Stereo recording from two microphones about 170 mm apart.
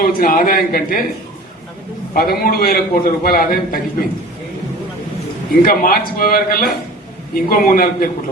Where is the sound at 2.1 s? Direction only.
60° left (ahead or behind).